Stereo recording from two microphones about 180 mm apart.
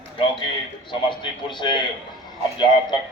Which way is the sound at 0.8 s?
25° left (ahead or behind).